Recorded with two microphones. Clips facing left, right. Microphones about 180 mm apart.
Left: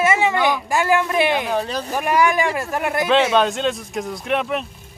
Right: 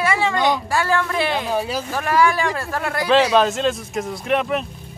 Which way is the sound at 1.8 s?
15° left (ahead or behind).